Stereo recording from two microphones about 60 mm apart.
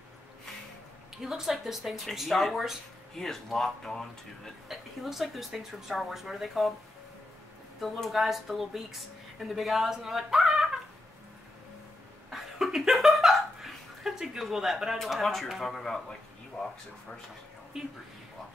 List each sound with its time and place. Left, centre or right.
1.2 s speech: centre
7.8 s speech: centre
12.3 s chuckle: centre
17.8 s speech: centre